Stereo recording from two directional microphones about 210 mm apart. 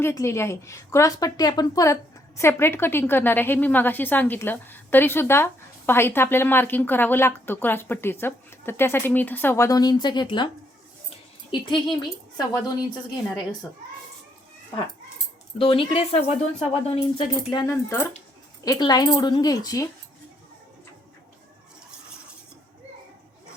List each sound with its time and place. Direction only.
0.0 s a woman's voice: 15° left (ahead or behind)
11.1 s a sound: 20° left (ahead or behind)
12.4 s speech: 20° left (ahead or behind)
15.5 s speech: 25° left (ahead or behind)